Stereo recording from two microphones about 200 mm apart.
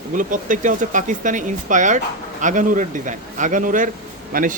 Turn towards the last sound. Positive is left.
turn(degrees=-45)  # may be behind; listen again after turning